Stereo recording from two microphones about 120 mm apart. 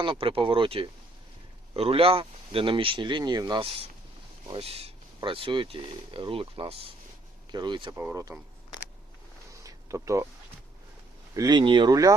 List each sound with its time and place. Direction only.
0.0 s speech: 45° right (ahead or behind)
8.1 s speech: 30° right (ahead or behind)
9.6 s a sound: 25° right (ahead or behind)
11.3 s speech: 35° right (ahead or behind)